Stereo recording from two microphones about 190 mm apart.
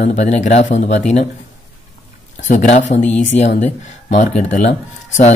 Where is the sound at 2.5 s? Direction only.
40° left (ahead or behind).